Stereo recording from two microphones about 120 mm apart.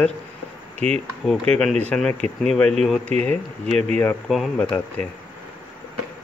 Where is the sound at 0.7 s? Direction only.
60° right (ahead or behind).